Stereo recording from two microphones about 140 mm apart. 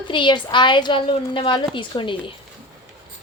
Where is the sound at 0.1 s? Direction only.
35° left (ahead or behind).